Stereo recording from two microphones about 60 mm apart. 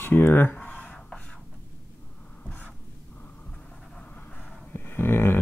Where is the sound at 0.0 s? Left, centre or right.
Left.